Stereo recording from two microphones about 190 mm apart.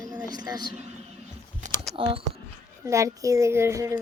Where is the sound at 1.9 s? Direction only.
25° right (ahead or behind).